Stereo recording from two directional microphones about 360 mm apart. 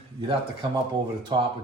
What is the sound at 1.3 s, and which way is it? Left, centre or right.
Speech, centre.